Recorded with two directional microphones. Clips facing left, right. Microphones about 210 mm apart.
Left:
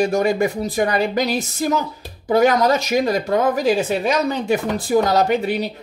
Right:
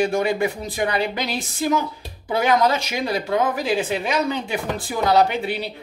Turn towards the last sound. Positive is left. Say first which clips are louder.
# left 2 dB
turn(degrees=40)  # may be behind; listen again after turning